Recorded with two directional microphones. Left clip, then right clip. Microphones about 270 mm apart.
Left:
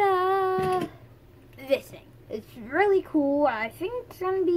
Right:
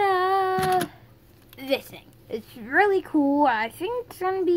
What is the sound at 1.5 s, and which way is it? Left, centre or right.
A woman's voice, right.